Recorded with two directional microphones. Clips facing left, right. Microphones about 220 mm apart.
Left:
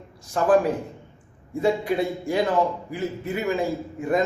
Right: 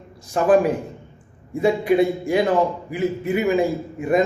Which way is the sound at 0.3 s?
10° right (ahead or behind).